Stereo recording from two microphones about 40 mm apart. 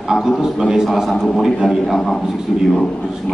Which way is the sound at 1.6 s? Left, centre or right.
Centre.